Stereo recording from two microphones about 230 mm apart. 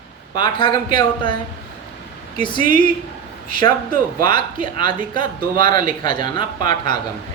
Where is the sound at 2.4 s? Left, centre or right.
Left.